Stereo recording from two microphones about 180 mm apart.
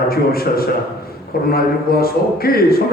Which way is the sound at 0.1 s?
55° left (ahead or behind).